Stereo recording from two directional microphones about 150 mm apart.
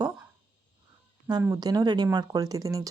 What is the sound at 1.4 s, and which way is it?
A woman's voice, 25° right (ahead or behind).